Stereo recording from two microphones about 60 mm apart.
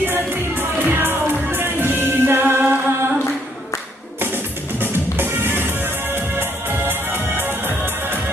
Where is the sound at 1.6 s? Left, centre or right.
Right.